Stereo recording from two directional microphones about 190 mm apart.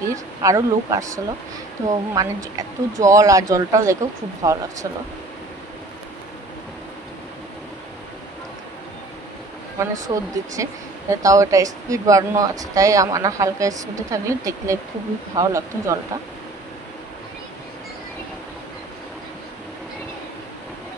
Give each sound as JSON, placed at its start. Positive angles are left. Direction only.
{"t": 0.1, "sound": "speech", "side_deg": -15}
{"t": 9.8, "sound": "speech", "side_deg": -15}